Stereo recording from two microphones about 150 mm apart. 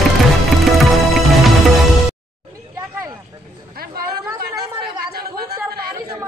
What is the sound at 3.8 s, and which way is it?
Chatter, 90° right.